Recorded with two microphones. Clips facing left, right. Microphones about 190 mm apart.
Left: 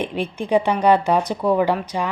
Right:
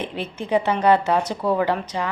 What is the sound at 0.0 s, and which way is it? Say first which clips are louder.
Speech: left 4 dB; 15° left (ahead or behind).